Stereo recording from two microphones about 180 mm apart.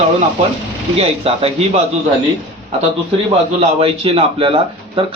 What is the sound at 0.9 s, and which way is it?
Speech, 35° right (ahead or behind).